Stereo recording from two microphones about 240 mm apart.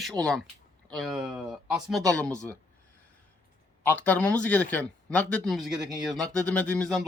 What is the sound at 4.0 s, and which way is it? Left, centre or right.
A man's voice, centre.